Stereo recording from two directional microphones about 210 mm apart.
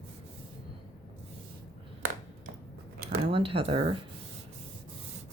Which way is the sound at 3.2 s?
25° right (ahead or behind).